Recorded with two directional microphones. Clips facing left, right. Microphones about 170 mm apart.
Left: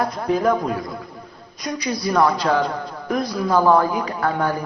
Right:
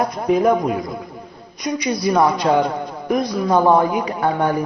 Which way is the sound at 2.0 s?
20° right (ahead or behind).